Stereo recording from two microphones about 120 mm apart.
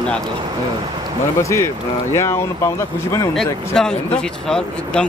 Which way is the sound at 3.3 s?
5° left (ahead or behind).